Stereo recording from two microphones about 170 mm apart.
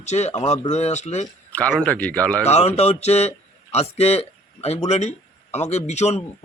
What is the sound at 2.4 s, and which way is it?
A man's voice, 40° left (ahead or behind).